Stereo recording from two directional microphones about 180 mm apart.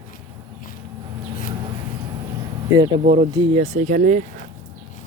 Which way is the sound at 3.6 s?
45° right (ahead or behind).